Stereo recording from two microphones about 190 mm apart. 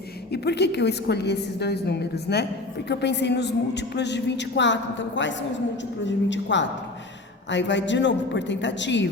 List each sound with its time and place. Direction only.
0.3 s a man's voice: 60° left (ahead or behind)